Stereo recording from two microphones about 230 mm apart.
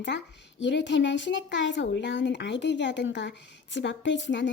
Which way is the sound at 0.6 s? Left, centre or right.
Left.